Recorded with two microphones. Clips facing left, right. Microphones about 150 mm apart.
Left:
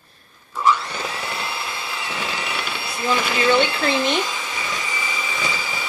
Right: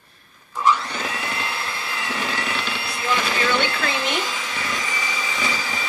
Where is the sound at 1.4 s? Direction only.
10° left (ahead or behind).